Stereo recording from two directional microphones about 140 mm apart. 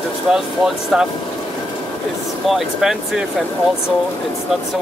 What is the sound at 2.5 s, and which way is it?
Speech, 5° right (ahead or behind).